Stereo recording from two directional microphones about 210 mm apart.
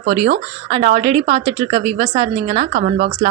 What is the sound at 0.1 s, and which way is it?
Speech, 30° right (ahead or behind).